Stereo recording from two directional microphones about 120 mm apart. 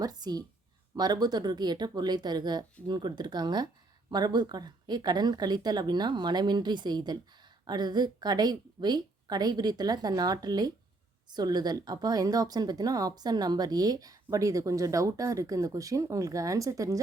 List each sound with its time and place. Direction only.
0.0 s speech: 35° right (ahead or behind)